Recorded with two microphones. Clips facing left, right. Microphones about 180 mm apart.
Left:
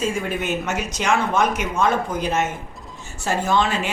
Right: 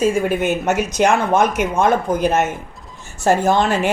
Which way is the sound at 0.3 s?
50° right (ahead or behind).